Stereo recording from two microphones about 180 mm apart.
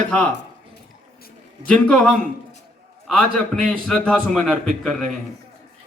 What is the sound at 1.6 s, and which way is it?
A man's voice, 5° left (ahead or behind).